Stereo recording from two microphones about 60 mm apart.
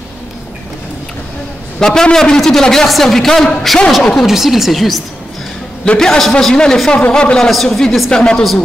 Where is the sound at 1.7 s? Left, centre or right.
Centre.